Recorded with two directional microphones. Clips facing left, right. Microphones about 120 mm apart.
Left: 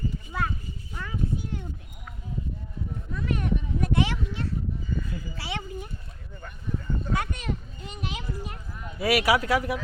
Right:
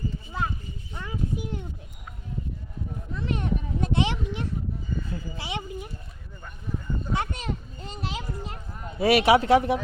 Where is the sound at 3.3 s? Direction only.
25° right (ahead or behind).